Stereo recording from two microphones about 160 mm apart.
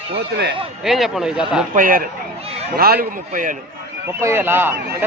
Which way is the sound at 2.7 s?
70° right (ahead or behind).